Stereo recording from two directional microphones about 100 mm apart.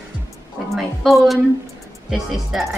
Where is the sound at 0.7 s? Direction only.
Centre (ahead or behind).